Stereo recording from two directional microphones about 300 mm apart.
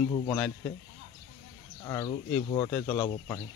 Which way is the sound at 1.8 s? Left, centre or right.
Centre.